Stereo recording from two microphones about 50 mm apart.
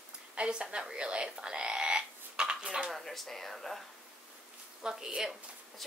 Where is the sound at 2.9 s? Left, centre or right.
Centre.